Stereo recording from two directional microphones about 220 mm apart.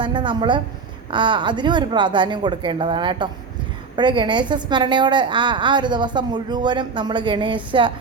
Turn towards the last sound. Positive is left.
turn(degrees=-20)  # may be behind; listen again after turning